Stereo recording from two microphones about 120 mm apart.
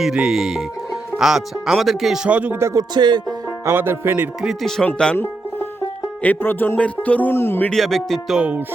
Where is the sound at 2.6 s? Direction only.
30° right (ahead or behind).